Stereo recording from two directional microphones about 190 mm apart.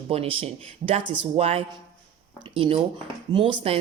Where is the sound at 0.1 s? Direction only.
30° right (ahead or behind).